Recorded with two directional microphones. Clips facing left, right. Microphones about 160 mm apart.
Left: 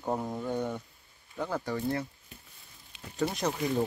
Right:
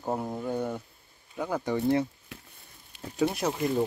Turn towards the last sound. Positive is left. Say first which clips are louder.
# right 2 dB
turn(degrees=0)  # may be behind; listen again after turning